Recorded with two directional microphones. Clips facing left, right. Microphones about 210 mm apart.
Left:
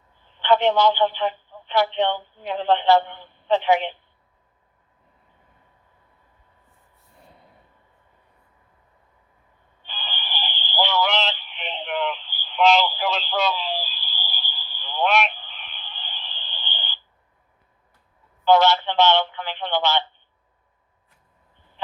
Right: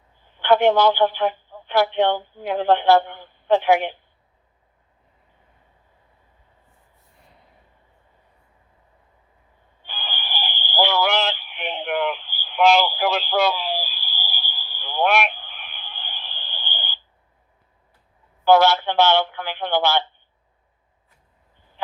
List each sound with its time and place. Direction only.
0.3 s a sound: 10° right (ahead or behind)
0.6 s a man's voice: 50° right (ahead or behind)
1.3 s a sound: 10° right (ahead or behind)
2.4 s speech: 10° right (ahead or behind)
9.8 s radio: 10° right (ahead or behind)
18.4 s speech: 10° right (ahead or behind)